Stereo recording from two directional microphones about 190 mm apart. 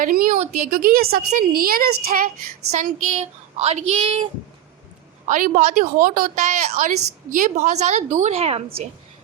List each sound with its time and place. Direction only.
0.0 s a woman's voice: 45° right (ahead or behind)
3.1 s a woman's voice: 30° right (ahead or behind)
5.3 s a woman's voice: 40° right (ahead or behind)